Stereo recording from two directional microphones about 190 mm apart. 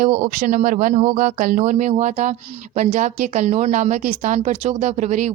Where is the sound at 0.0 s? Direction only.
40° right (ahead or behind).